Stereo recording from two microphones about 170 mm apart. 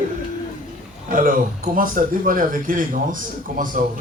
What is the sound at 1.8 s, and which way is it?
Speech, 55° right (ahead or behind).